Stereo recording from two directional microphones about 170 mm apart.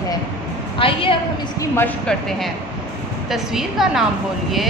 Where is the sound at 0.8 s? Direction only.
30° left (ahead or behind).